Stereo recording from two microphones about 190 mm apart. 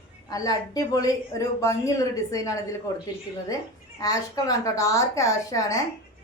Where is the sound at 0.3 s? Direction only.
20° left (ahead or behind).